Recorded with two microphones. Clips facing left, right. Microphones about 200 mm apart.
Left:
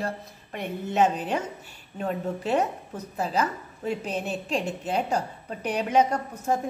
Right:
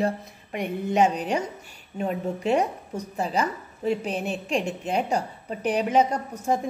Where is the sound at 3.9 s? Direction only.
10° right (ahead or behind).